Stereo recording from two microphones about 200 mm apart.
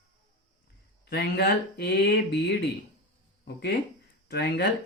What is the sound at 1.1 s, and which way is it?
Speech, 55° left (ahead or behind).